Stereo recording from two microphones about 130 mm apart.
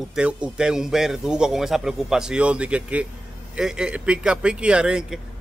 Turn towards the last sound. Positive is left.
turn(degrees=-5)  # may be behind; listen again after turning